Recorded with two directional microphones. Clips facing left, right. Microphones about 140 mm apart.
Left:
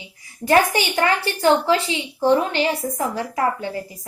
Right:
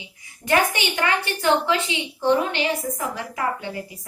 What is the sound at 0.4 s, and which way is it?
A woman's voice, 35° left (ahead or behind).